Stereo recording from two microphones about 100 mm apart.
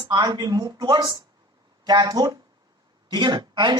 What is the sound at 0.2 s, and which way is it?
Speech, 40° right (ahead or behind).